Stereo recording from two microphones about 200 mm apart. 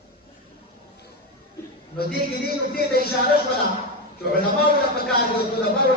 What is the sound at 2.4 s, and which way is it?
A man's voice, 50° left (ahead or behind).